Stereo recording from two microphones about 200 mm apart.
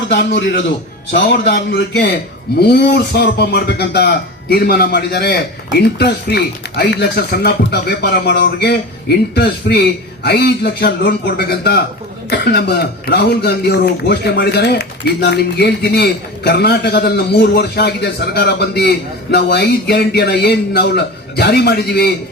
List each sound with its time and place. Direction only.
1.1 s speech: 55° left (ahead or behind)